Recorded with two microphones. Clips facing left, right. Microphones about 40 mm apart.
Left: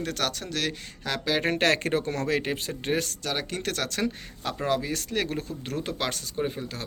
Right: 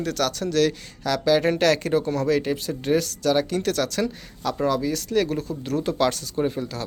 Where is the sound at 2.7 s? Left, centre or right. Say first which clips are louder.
Right 7 dB; left.